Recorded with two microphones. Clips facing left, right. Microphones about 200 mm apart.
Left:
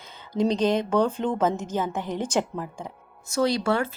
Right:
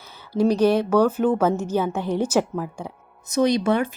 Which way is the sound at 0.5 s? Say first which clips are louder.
Right 5 dB; 10° right (ahead or behind).